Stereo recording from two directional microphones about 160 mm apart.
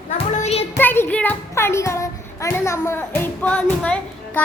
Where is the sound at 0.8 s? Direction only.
10° left (ahead or behind).